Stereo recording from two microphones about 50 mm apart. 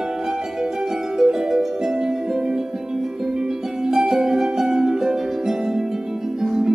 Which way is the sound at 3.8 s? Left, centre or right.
Centre.